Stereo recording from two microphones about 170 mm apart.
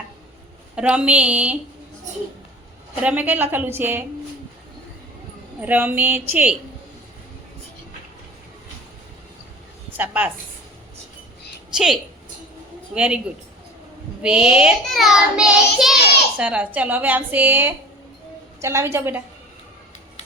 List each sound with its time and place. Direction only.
0.8 s a woman's voice: 5° right (ahead or behind)
3.0 s a woman's voice: 10° right (ahead or behind)
5.5 s a woman's voice: 10° right (ahead or behind)
10.0 s a woman's voice: 10° right (ahead or behind)
11.7 s child singing: 5° right (ahead or behind)
12.9 s a woman's voice: 5° right (ahead or behind)
14.2 s child singing: 5° right (ahead or behind)
16.4 s a woman's voice: 5° right (ahead or behind)